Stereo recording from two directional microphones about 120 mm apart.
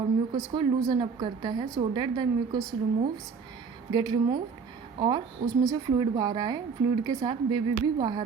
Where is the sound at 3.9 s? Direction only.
35° right (ahead or behind).